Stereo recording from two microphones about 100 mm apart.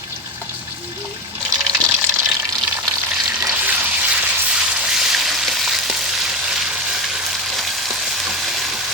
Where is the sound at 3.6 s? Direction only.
15° right (ahead or behind).